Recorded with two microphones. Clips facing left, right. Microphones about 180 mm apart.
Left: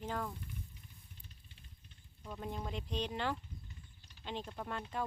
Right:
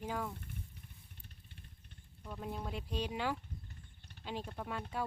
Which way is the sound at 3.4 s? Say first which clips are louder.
Right 1 dB; 55° right (ahead or behind).